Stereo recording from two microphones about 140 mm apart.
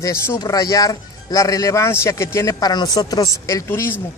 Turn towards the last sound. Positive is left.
turn(degrees=15)  # may be behind; listen again after turning